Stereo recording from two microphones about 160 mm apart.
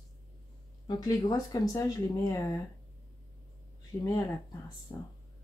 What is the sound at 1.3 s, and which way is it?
Speech, 20° left (ahead or behind).